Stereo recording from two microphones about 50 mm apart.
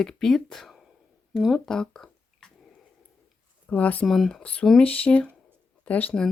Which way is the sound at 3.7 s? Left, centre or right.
Left.